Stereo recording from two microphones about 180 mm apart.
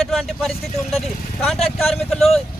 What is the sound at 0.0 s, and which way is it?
Speech, centre (ahead or behind).